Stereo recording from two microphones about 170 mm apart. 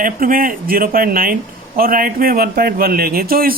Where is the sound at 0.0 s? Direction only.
55° right (ahead or behind).